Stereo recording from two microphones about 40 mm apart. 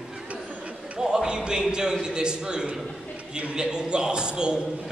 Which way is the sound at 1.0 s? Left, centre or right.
Centre.